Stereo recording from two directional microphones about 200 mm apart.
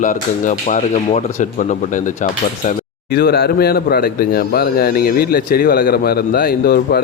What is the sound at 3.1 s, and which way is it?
A man's voice, 50° left (ahead or behind).